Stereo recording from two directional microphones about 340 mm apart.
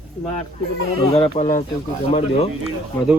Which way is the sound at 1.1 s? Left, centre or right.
Centre.